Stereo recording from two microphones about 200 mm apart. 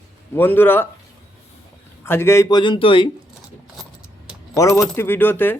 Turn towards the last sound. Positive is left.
turn(degrees=10)  # may be behind; listen again after turning